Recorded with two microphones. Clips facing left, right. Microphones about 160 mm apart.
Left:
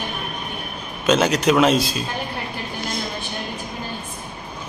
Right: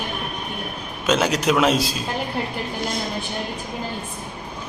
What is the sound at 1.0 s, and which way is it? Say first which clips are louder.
Speech: left 2 dB; 5° right (ahead or behind).